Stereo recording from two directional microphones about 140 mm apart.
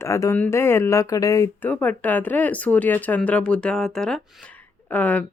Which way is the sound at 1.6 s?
15° left (ahead or behind).